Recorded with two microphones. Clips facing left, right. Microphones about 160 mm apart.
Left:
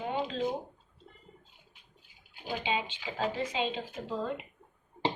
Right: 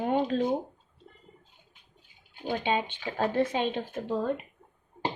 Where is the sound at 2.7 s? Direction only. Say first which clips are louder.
Right 4 dB; 55° right (ahead or behind).